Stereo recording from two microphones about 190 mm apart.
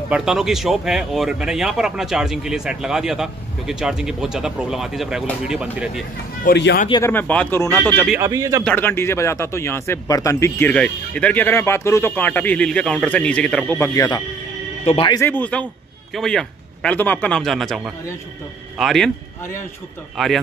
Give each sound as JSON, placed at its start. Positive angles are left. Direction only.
{"t": 0.1, "sound": "speech", "side_deg": -5}
{"t": 6.4, "sound": "speech", "side_deg": 60}
{"t": 6.9, "sound": "speech", "side_deg": 15}
{"t": 8.2, "sound": "a man's voice", "side_deg": -15}
{"t": 8.6, "sound": "speech", "side_deg": 10}
{"t": 13.7, "sound": "speech", "side_deg": 15}
{"t": 15.1, "sound": "speech", "side_deg": 10}
{"t": 20.2, "sound": "speech", "side_deg": 0}